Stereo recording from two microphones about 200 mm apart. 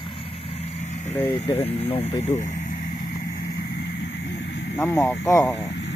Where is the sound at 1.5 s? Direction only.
25° left (ahead or behind).